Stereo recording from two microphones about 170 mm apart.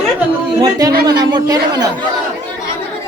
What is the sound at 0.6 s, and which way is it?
Speech, 20° right (ahead or behind).